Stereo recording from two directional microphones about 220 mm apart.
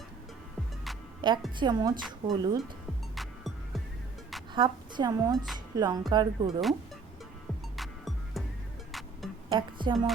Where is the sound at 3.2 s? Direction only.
Centre (ahead or behind).